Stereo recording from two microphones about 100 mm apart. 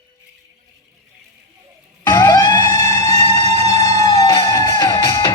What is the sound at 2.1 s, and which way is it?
Music, 30° left (ahead or behind).